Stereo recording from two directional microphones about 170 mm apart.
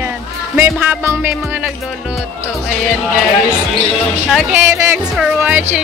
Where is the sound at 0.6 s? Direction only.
10° right (ahead or behind).